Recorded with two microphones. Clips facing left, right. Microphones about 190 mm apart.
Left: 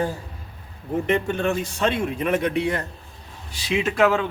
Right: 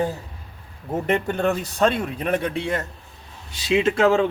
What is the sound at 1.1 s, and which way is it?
Speech, 40° right (ahead or behind).